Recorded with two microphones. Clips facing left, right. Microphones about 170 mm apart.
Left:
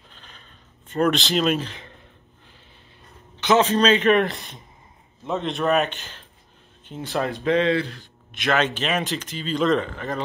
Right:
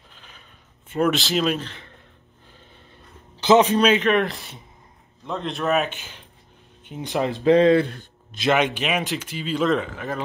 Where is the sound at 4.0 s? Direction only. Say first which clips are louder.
Left 2 dB; centre (ahead or behind); by 7.3 s 15° right (ahead or behind).